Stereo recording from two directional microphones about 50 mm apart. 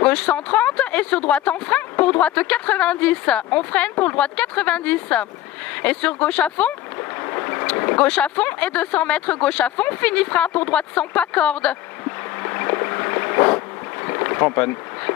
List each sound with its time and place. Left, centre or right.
0.0 s speech: left
7.0 s speech: left
12.4 s a sound: left
14.0 s boat: left